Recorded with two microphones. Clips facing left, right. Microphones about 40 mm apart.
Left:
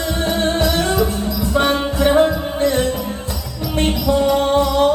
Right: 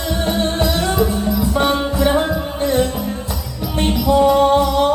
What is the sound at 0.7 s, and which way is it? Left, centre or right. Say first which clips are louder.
Music: left 1 dB; left.